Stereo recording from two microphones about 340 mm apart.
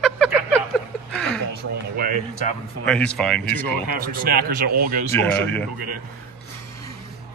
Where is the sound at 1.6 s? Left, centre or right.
Right.